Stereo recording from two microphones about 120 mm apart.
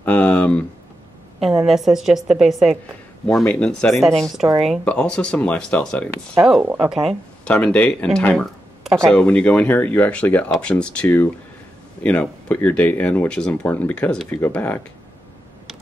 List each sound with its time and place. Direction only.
0.0 s a sound: 15° left (ahead or behind)
1.4 s a woman's voice: 5° right (ahead or behind)
3.3 s a woman's voice: 5° left (ahead or behind)
6.6 s speech: 15° right (ahead or behind)
6.9 s a woman's voice: centre (ahead or behind); by 14.8 s 15° left (ahead or behind)